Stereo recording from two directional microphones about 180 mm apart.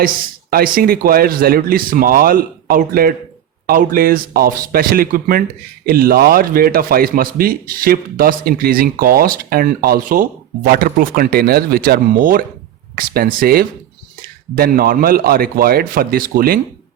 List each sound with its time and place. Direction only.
0.5 s a man's voice: 55° right (ahead or behind)